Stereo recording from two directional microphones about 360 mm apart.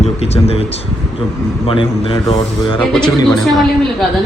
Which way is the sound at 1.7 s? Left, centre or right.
Centre.